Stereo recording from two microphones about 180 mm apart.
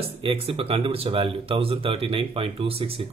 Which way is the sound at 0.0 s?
30° right (ahead or behind).